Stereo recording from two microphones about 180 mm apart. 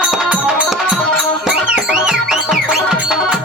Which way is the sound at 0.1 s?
5° right (ahead or behind).